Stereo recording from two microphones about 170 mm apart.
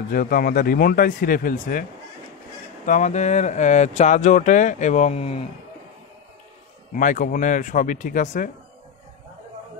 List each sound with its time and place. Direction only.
0.1 s speech: 55° left (ahead or behind); by 5.5 s 35° left (ahead or behind)
6.9 s speech: 50° left (ahead or behind)